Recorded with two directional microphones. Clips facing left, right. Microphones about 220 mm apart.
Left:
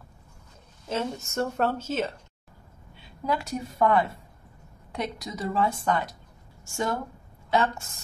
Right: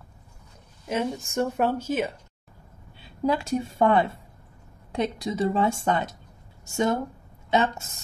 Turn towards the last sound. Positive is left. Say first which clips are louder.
# right 2 dB
turn(degrees=-20)  # may be behind; listen again after turning